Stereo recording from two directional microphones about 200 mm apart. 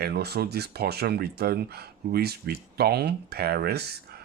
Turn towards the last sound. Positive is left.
turn(degrees=-55)  # may be behind; listen again after turning